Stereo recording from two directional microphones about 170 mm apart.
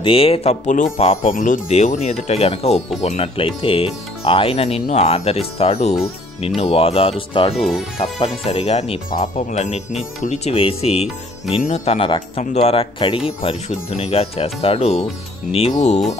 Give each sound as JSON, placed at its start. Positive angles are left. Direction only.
{"t": 0.0, "sound": "speech", "side_deg": 35}
{"t": 7.5, "sound": "speech", "side_deg": 0}
{"t": 8.0, "sound": "speech", "side_deg": 35}
{"t": 9.4, "sound": "speech", "side_deg": 45}